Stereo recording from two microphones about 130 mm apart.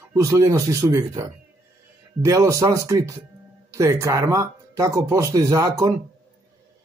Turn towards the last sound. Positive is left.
turn(degrees=-25)  # may be behind; listen again after turning